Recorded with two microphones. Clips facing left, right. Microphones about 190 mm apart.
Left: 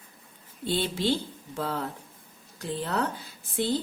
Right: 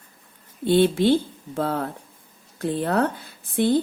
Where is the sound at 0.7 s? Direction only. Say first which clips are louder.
Right 10 dB; 55° right (ahead or behind).